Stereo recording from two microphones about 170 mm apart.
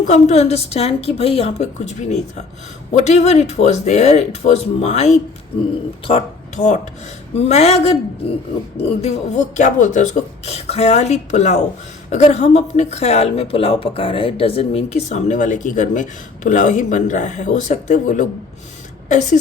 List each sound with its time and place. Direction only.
0.0 s a woman's voice: 40° left (ahead or behind)